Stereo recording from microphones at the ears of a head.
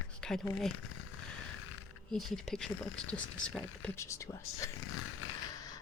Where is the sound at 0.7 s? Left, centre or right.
Left.